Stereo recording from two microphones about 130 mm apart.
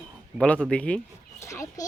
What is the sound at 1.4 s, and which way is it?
Speech, 25° left (ahead or behind).